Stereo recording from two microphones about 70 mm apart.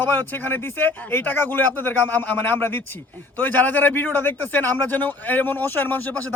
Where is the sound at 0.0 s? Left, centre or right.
Left.